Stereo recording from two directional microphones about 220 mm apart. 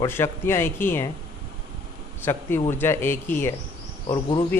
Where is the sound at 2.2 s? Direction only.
10° left (ahead or behind).